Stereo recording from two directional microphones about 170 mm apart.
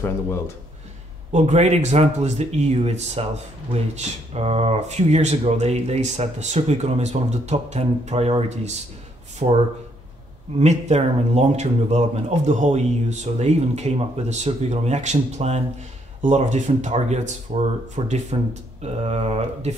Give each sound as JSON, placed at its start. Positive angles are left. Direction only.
{"t": 1.3, "sound": "speech", "side_deg": -40}
{"t": 10.6, "sound": "speech", "side_deg": -40}